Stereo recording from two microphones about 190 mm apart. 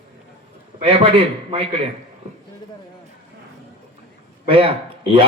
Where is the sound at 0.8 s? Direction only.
30° right (ahead or behind).